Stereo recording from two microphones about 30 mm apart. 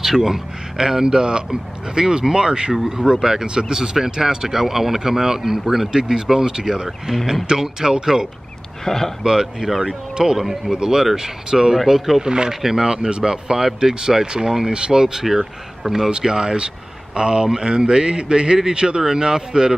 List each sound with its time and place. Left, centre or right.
0.0 s speech: centre; by 3.7 s right
3.7 s speech: centre
5.9 s speech: right
8.8 s speech: centre
9.2 s speech: right
12.2 s speech: right
15.2 s speech: centre
16.1 s a man's voice: right